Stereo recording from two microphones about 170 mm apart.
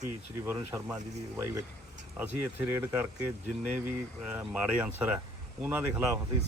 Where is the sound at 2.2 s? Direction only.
10° right (ahead or behind).